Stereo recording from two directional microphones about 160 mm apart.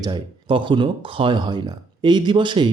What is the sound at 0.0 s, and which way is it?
Speech, 30° right (ahead or behind).